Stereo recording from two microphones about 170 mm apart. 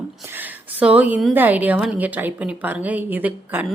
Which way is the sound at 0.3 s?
10° right (ahead or behind).